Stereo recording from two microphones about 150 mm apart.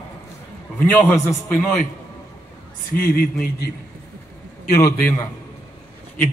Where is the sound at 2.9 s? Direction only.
80° left.